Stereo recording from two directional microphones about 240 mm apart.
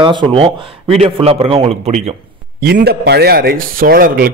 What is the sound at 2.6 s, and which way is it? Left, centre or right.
Speech, right.